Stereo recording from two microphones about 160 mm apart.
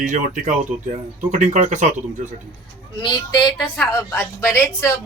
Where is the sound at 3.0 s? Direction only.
25° left (ahead or behind).